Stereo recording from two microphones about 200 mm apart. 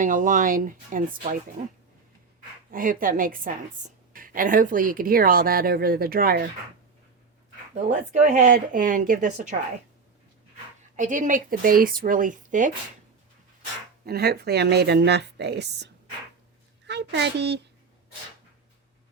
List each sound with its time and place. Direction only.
0.0 s speech: 40° right (ahead or behind)
2.7 s a woman's voice: 45° right (ahead or behind)
7.9 s speech: 40° right (ahead or behind)
10.9 s a woman's voice: 40° right (ahead or behind)
14.0 s speech: 50° right (ahead or behind)